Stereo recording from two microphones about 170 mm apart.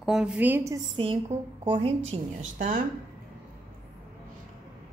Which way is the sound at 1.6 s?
35° right (ahead or behind).